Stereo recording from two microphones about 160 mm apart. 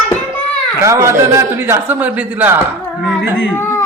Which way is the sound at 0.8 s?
20° right (ahead or behind).